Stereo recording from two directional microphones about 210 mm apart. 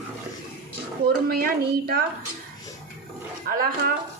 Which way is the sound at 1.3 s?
45° right (ahead or behind).